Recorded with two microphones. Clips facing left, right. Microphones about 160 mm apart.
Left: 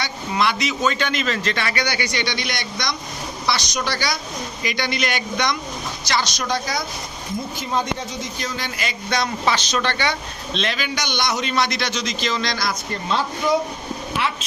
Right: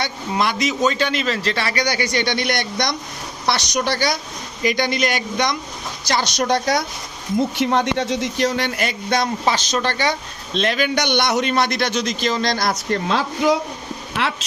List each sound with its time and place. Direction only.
0.0 s a man's voice: 45° right (ahead or behind)
6.1 s a woman's voice: 55° right (ahead or behind)
13.1 s speech: 90° right